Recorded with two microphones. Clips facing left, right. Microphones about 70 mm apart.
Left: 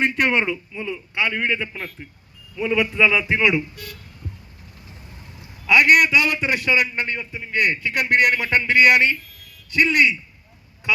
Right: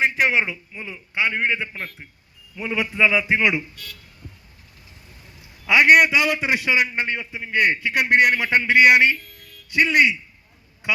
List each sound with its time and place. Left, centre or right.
0.0 s a man's voice: centre
0.7 s a man's voice: centre
5.6 s a man's voice: right